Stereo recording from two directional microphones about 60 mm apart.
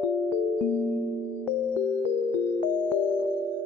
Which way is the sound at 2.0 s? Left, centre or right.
Right.